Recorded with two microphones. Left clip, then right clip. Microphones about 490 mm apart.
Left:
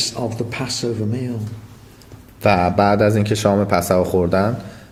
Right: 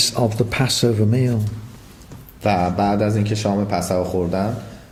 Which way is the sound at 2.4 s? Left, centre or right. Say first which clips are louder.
Left 4 dB; left.